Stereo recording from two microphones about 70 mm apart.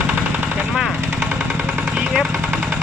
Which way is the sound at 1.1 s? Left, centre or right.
Right.